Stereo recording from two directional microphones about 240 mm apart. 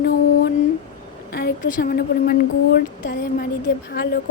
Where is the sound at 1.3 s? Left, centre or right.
Left.